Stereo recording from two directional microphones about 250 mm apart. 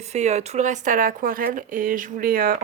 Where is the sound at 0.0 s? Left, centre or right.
Right.